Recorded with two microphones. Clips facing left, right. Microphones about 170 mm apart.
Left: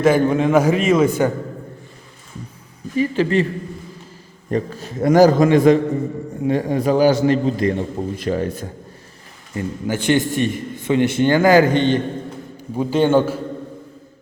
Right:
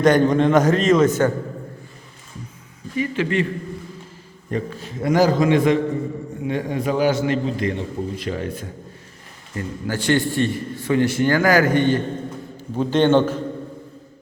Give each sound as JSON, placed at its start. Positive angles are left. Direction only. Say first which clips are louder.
{"t": 0.0, "sound": "a man's voice", "louder": "even", "side_deg": 5}
{"t": 3.0, "sound": "a man's voice", "louder": "left 4 dB", "side_deg": 35}
{"t": 4.5, "sound": "a man's voice", "louder": "left 4 dB", "side_deg": 40}
{"t": 9.6, "sound": "a man's voice", "louder": "left 3 dB", "side_deg": 20}
{"t": 12.5, "sound": "a man's voice", "louder": "left 1 dB", "side_deg": 10}